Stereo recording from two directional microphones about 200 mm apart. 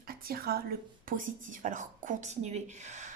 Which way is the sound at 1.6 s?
40° right (ahead or behind).